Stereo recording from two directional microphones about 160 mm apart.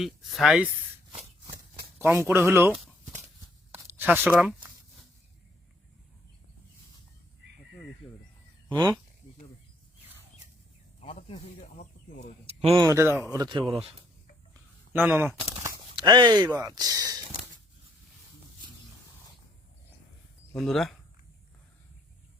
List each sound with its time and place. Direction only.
0.0 s speech: centre (ahead or behind)
2.0 s speech: 15° right (ahead or behind)
11.0 s snake: 40° left (ahead or behind)
12.5 s a sound: 40° right (ahead or behind)
12.8 s speech: 15° right (ahead or behind)
13.3 s speech: 25° right (ahead or behind)
14.9 s speech: 15° right (ahead or behind)
16.0 s speech: 30° right (ahead or behind)
20.6 s speech: 5° left (ahead or behind)